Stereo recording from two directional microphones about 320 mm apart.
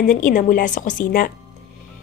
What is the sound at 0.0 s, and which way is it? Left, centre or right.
A woman's voice, left.